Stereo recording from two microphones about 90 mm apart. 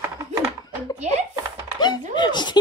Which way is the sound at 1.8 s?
55° left (ahead or behind).